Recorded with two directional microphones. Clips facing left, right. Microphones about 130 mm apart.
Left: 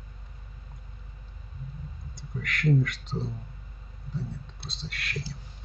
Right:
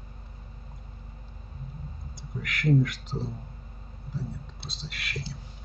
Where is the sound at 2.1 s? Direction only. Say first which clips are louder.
Left 1 dB; centre (ahead or behind).